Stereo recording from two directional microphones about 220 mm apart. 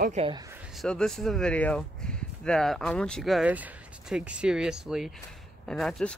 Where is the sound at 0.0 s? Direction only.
30° right (ahead or behind).